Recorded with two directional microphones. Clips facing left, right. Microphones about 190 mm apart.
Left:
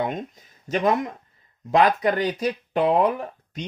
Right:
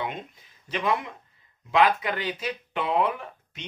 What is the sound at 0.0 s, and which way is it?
Speech, 45° left (ahead or behind).